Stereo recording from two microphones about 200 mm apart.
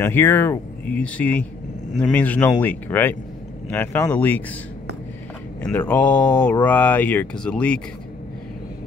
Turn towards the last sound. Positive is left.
turn(degrees=5)  # may be behind; listen again after turning